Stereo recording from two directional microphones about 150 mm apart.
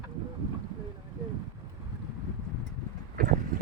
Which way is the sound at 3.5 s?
70° right (ahead or behind).